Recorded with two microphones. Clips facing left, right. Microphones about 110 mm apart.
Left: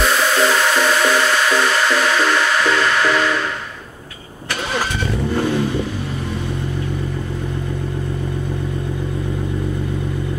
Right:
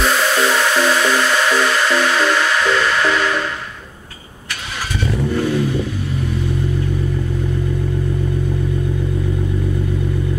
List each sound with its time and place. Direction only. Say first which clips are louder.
5.0 s vehicle: right 4 dB; 30° left (ahead or behind)